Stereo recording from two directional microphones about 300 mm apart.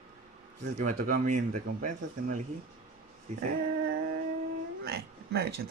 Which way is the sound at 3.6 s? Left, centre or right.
Right.